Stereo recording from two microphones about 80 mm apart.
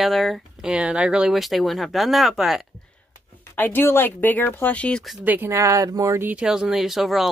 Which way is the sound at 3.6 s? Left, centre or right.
Left.